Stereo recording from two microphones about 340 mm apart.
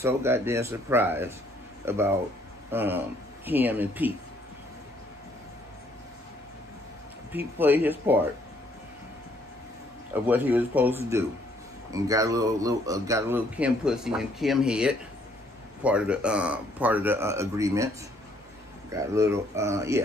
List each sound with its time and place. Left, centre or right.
0.0 s speech: centre
7.3 s speech: centre
10.2 s speech: centre
18.9 s speech: centre